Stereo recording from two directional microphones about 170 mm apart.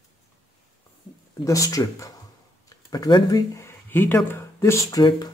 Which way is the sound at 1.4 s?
20° left (ahead or behind).